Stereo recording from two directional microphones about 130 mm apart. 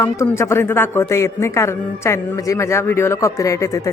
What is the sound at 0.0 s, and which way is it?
Speech, 20° left (ahead or behind).